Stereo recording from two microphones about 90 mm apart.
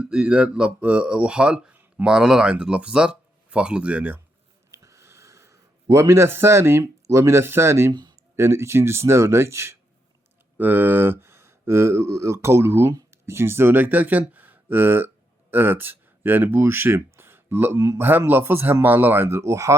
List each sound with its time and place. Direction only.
0.0 s speech: 10° right (ahead or behind)
4.7 s a sound: 35° right (ahead or behind)
8.4 s speech: 30° right (ahead or behind)